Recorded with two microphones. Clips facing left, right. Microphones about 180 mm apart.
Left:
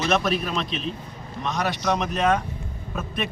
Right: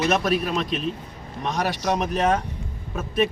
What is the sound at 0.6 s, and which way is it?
Speech, 45° right (ahead or behind).